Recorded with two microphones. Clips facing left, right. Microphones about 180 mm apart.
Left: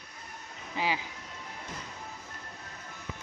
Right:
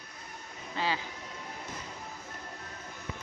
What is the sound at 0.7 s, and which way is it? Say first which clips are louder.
Speech: left 1 dB; 15° left (ahead or behind).